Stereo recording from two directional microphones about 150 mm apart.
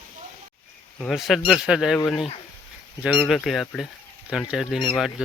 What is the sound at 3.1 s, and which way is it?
Speech, 5° left (ahead or behind).